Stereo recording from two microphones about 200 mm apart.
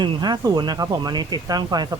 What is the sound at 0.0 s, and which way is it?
Speech, 20° right (ahead or behind).